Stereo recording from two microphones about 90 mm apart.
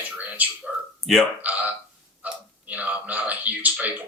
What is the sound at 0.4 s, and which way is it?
Speech, 20° right (ahead or behind).